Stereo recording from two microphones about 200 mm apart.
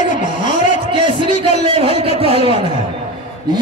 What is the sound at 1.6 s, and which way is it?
Speech, 25° right (ahead or behind).